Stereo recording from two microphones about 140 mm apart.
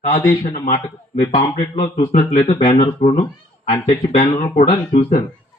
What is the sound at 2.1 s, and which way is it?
Speech, 60° left (ahead or behind).